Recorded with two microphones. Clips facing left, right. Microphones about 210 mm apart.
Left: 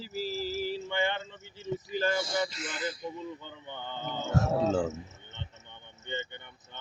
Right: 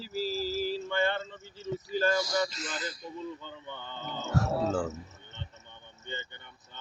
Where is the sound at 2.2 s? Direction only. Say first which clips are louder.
Right 1 dB; 25° left (ahead or behind).